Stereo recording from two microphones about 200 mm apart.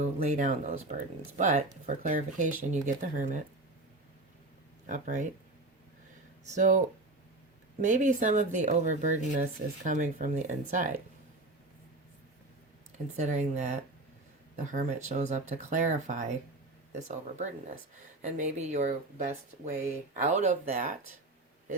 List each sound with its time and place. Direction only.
0.0 s speech: 40° right (ahead or behind)
4.9 s speech: 40° right (ahead or behind)
6.5 s speech: 40° right (ahead or behind)
13.1 s speech: 35° right (ahead or behind)